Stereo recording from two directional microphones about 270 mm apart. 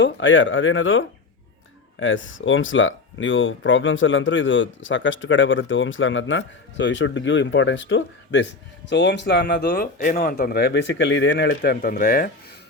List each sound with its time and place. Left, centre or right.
0.0 s speech: left